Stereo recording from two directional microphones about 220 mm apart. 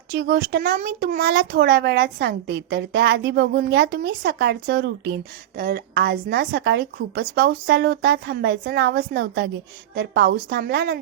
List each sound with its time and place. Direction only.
0.1 s a child's voice: 40° right (ahead or behind)